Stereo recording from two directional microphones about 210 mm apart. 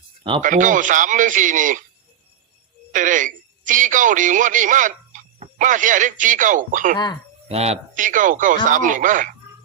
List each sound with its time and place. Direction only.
0.2 s speech: 25° right (ahead or behind)
0.4 s a man's voice: 40° right (ahead or behind)
2.9 s a man's voice: 40° right (ahead or behind)